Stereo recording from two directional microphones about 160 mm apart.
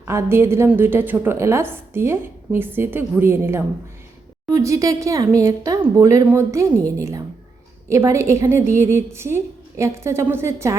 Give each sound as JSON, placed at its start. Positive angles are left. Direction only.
{"t": 0.1, "sound": "a woman's voice", "side_deg": -15}
{"t": 7.9, "sound": "a woman's voice", "side_deg": -20}